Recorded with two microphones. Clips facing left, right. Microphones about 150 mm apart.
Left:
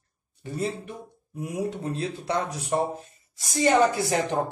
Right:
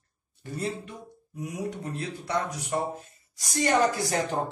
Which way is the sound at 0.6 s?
15° left (ahead or behind).